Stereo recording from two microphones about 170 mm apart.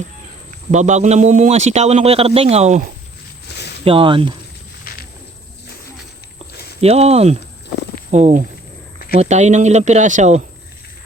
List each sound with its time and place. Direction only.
0.7 s a man's voice: 45° right (ahead or behind)
3.8 s a man's voice: 30° right (ahead or behind)
6.8 s a man's voice: 35° right (ahead or behind)